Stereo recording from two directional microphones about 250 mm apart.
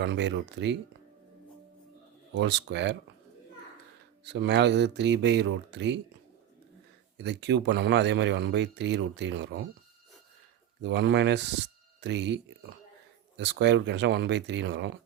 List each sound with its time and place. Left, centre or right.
0.0 s speech: right
2.3 s speech: right
4.3 s speech: right
7.2 s speech: right
10.8 s speech: right